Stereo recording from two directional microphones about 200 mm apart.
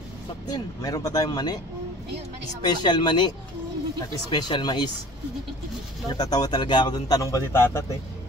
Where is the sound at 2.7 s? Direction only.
20° left (ahead or behind).